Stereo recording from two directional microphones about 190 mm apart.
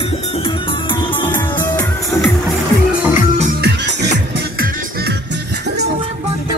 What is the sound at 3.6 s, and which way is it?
Music, 65° right (ahead or behind).